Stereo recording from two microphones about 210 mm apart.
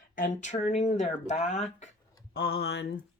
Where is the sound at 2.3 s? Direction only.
45° left (ahead or behind).